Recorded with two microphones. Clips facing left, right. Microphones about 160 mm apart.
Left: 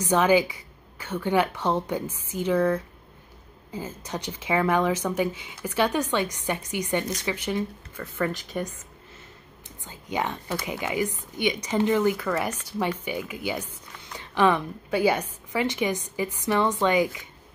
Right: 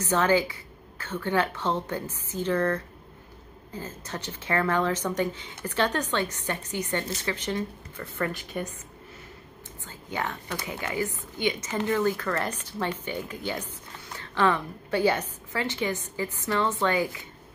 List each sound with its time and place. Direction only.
0.0 s speech: 15° left (ahead or behind)
9.8 s speech: 15° left (ahead or behind)